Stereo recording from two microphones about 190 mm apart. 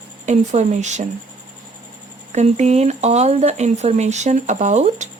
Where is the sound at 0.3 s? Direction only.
40° right (ahead or behind).